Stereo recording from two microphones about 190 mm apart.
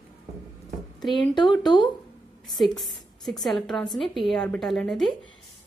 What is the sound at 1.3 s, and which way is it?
Speech, 25° left (ahead or behind).